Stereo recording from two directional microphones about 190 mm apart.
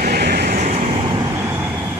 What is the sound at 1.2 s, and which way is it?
Vehicle, 15° right (ahead or behind).